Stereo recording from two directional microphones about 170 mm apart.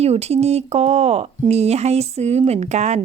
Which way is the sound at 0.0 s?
40° right (ahead or behind).